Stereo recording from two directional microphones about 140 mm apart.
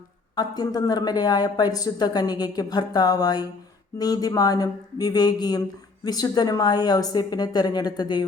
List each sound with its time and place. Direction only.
0.3 s speech: 30° left (ahead or behind)